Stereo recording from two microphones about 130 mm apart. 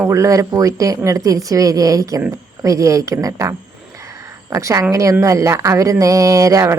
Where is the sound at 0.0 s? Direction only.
25° right (ahead or behind).